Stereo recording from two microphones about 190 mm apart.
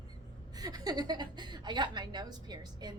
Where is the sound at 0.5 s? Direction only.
20° right (ahead or behind).